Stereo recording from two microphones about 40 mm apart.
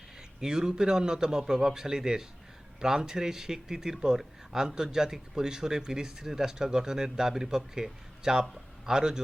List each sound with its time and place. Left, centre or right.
0.3 s speech: centre